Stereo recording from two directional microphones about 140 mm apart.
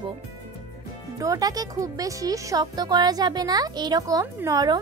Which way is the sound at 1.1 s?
25° right (ahead or behind).